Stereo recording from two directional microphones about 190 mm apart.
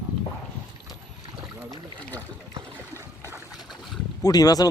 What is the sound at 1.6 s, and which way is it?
Speech, 15° right (ahead or behind).